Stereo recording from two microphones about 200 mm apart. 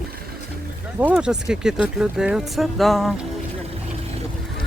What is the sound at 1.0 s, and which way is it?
Speech, 5° right (ahead or behind).